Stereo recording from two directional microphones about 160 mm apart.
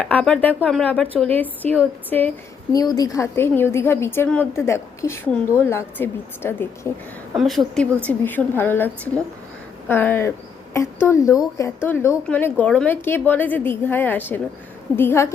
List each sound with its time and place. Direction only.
0.0 s a woman's voice: 5° left (ahead or behind)
2.7 s a woman's voice: 25° left (ahead or behind)
7.3 s a woman's voice: centre (ahead or behind); by 15.3 s 15° left (ahead or behind)